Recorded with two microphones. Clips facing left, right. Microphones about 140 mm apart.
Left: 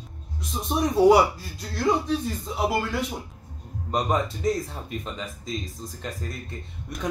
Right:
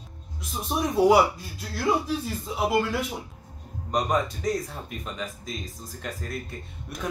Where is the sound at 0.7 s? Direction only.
Centre (ahead or behind).